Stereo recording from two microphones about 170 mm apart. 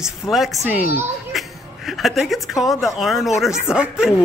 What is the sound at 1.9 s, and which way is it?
A man's voice, centre (ahead or behind).